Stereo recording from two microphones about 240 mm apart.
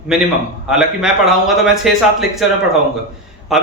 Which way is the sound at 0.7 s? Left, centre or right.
Centre.